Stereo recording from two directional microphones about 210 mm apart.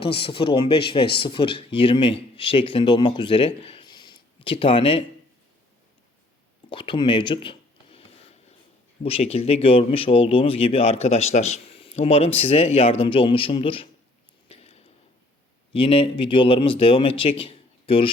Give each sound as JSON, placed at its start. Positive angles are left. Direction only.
{"t": 0.0, "sound": "speech", "side_deg": 25}
{"t": 6.7, "sound": "speech", "side_deg": 25}
{"t": 9.0, "sound": "speech", "side_deg": 30}
{"t": 14.4, "sound": "a sound", "side_deg": 30}
{"t": 15.7, "sound": "speech", "side_deg": 25}